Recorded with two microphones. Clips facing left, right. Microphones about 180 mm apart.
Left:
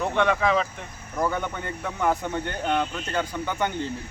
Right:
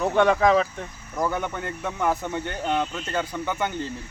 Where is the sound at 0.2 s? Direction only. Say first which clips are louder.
Right 4 dB; 35° right (ahead or behind).